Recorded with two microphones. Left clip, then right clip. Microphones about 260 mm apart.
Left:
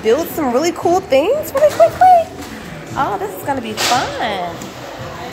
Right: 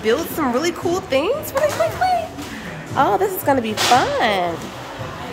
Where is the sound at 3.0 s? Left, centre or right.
Centre.